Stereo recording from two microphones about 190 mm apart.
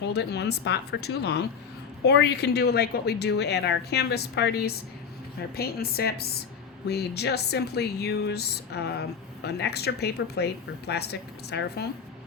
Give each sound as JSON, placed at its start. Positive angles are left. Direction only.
{"t": 0.0, "sound": "speech", "side_deg": 60}